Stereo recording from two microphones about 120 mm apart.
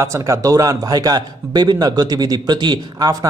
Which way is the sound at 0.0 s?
25° right (ahead or behind).